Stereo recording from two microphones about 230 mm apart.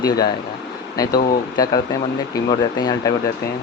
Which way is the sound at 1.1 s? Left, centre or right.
Left.